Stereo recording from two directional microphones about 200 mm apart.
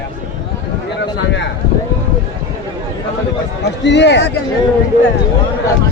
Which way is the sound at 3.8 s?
60° left (ahead or behind).